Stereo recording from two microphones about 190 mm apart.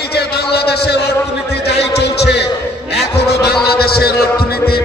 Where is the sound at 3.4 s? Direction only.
55° left (ahead or behind).